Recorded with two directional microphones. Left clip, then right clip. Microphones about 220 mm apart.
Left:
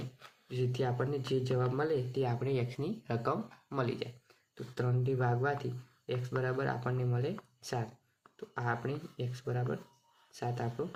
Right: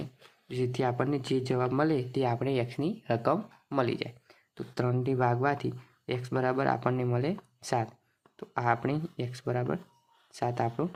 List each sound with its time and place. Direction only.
0.4 s speech: 45° right (ahead or behind)